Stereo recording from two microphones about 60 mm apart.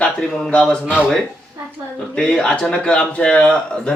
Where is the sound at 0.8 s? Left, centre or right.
Right.